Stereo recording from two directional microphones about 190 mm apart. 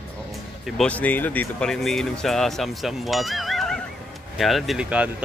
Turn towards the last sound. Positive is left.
turn(degrees=-5)  # may be behind; listen again after turning